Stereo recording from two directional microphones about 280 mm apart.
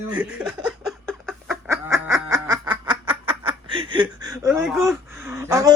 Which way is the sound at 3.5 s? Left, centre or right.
Centre.